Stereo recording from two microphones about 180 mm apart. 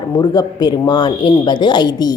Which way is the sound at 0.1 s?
20° left (ahead or behind).